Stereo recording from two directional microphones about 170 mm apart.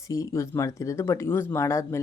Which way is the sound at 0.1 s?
20° left (ahead or behind).